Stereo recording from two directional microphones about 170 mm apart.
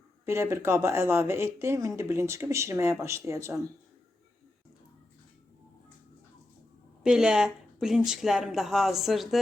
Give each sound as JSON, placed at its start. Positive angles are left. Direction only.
{"t": 0.3, "sound": "speech", "side_deg": -15}
{"t": 7.0, "sound": "speech", "side_deg": -5}